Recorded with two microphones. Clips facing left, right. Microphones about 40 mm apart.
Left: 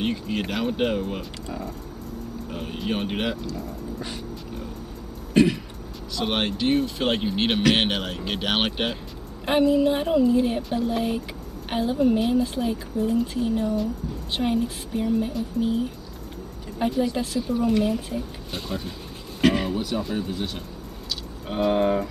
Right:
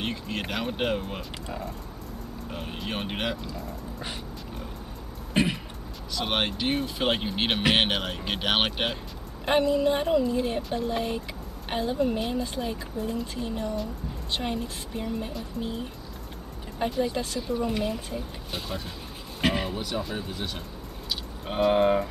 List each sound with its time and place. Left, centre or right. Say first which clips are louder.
0.0 s speech: left 5 dB; centre
5.3 s a sound: left 6 dB; centre
6.1 s speech: left 2 dB; centre